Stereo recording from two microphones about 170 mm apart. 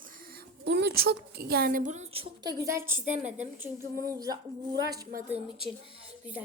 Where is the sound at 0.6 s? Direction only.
80° right; by 2.2 s 45° right (ahead or behind).